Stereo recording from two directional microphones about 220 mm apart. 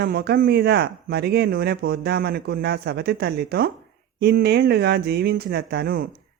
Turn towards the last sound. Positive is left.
turn(degrees=-45)  # may be behind; listen again after turning